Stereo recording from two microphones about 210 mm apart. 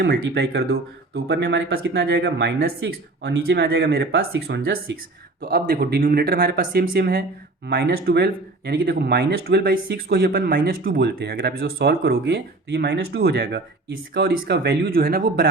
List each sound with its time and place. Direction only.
0.0 s speech: 50° right (ahead or behind)